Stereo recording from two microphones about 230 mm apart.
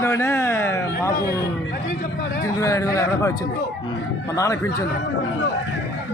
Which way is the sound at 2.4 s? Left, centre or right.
Centre.